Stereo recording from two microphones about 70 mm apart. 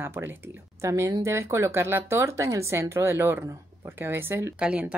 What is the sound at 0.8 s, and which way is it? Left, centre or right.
Speech, right.